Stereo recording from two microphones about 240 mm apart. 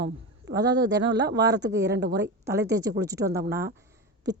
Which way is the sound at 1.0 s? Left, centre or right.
Right.